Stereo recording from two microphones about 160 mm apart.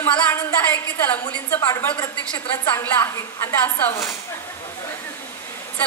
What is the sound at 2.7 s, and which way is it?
A woman's voice, 15° left (ahead or behind).